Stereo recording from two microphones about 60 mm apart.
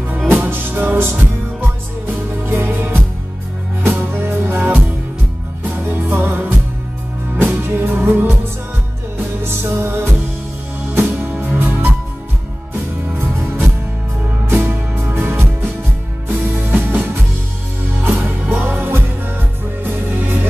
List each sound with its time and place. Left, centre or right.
0.3 s music: right
9.4 s music: right
14.5 s music: right
16.4 s music: right
18.7 s music: right